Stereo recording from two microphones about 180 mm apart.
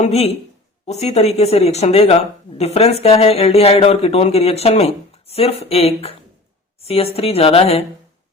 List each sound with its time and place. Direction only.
0.0 s speech: 35° left (ahead or behind)